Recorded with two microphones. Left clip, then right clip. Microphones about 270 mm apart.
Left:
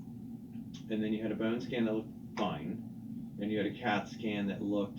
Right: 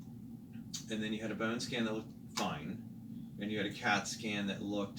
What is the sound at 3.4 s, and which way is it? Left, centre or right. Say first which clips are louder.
Speech: left 1 dB; right.